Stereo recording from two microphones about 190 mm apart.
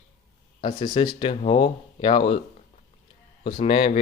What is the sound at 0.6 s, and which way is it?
Speech, 25° left (ahead or behind).